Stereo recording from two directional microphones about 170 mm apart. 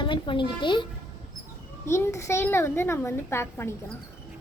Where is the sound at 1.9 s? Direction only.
15° left (ahead or behind).